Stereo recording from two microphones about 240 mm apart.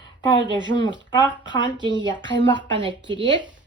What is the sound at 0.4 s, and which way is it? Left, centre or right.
Speech, centre.